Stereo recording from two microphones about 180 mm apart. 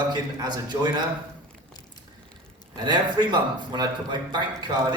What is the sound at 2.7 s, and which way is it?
A man's voice, 25° right (ahead or behind).